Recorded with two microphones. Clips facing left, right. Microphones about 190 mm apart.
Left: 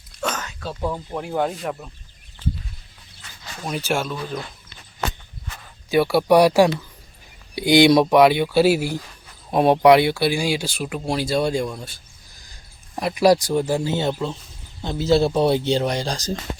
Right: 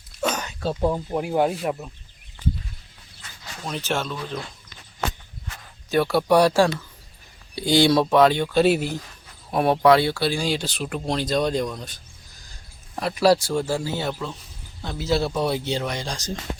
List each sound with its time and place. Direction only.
0.2 s a sound: 10° right (ahead or behind)
0.6 s speech: 25° right (ahead or behind)
0.9 s speech: 15° right (ahead or behind)
3.6 s speech: 10° left (ahead or behind)
5.9 s speech: 10° left (ahead or behind)
9.5 s speech: 20° left (ahead or behind)
13.0 s speech: 15° left (ahead or behind); by 16.2 s 35° left (ahead or behind)